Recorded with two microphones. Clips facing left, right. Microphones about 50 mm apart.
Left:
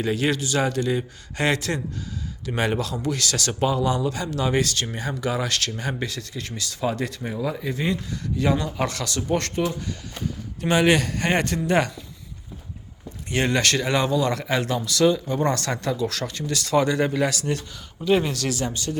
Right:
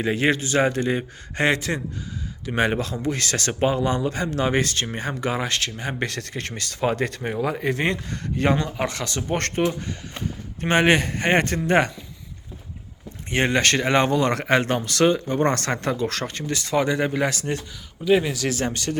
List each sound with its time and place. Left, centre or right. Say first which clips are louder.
0.0 s a man's voice: right 2 dB; right
6.0 s speech: right 3 dB; right
8.8 s a man's voice: even; right
13.3 s a man's voice: right 2 dB; right
18.0 s a man's voice: right 1 dB; centre
18.4 s speech: right 2 dB; right
18.7 s speech: right 2 dB; right